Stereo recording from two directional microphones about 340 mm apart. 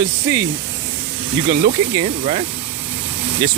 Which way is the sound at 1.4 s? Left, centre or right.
Centre.